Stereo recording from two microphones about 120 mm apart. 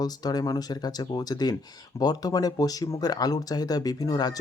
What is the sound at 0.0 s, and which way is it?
Speech, 35° left (ahead or behind).